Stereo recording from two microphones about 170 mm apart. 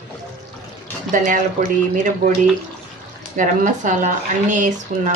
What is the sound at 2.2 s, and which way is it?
Speech, 65° right (ahead or behind).